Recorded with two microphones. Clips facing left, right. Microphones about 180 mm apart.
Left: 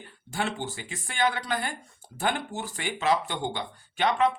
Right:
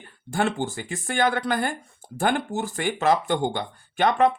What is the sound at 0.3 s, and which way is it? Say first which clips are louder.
Speech: right 6 dB; 50° right (ahead or behind).